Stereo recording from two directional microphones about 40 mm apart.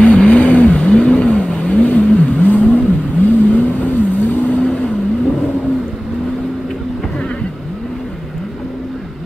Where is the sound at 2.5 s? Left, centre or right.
Left.